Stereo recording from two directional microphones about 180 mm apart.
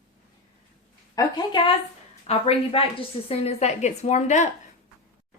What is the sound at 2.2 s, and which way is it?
A woman's voice, 35° left (ahead or behind).